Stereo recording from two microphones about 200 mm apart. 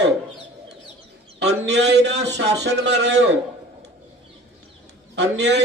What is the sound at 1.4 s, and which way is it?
A man's voice, 60° right (ahead or behind).